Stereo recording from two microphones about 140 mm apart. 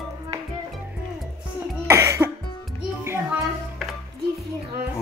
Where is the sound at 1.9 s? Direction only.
20° right (ahead or behind).